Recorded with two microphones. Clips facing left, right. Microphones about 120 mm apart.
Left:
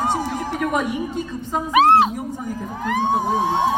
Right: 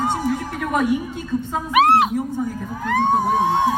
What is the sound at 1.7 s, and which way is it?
Speech, 30° left (ahead or behind).